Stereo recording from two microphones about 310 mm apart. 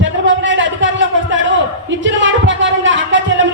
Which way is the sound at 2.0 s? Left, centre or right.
Right.